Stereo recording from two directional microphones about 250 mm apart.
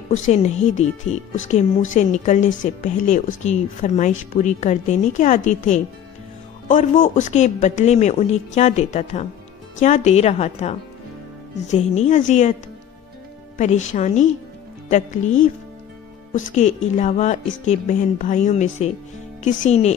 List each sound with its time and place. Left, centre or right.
0.3 s a woman's voice: left
13.6 s speech: left